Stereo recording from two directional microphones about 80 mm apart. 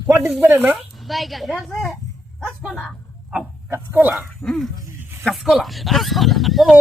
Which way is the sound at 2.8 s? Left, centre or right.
Centre.